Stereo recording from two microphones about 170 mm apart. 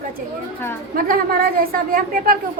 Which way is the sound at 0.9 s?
55° right (ahead or behind).